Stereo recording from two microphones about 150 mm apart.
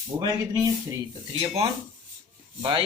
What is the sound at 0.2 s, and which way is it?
Speech, 25° right (ahead or behind).